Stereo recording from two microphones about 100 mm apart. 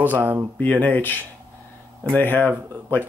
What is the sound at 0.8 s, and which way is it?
Speech, 20° left (ahead or behind).